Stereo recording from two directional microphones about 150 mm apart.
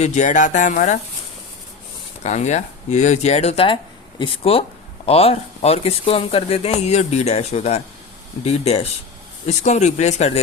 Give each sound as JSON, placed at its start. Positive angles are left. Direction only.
{"t": 0.0, "sound": "speech", "side_deg": 50}
{"t": 2.2, "sound": "speech", "side_deg": 50}